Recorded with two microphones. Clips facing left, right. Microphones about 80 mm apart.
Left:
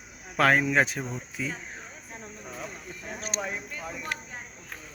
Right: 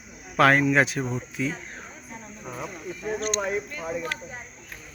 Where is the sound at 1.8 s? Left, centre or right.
Centre.